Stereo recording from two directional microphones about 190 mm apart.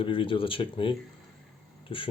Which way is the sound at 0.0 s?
30° left (ahead or behind).